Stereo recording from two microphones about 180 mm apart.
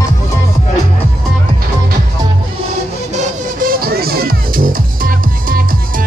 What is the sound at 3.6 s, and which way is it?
Music, 55° right (ahead or behind).